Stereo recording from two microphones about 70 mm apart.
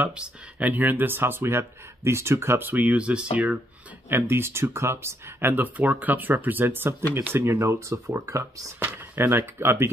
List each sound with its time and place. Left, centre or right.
0.1 s speech: centre; by 2.7 s right
2.7 s speech: right
4.1 s speech: right
8.7 s speech: right